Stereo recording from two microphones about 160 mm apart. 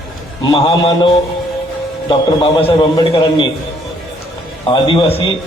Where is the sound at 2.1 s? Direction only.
35° left (ahead or behind).